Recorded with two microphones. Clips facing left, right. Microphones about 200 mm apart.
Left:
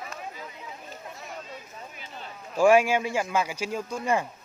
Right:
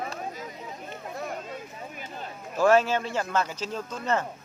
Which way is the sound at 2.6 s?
10° left (ahead or behind).